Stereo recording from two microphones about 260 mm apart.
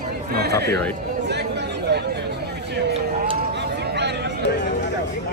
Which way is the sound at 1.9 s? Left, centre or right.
Right.